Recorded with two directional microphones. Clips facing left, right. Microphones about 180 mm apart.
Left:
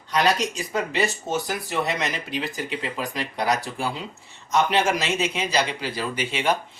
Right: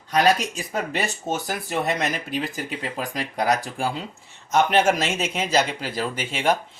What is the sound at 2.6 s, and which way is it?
Speech, 50° right (ahead or behind).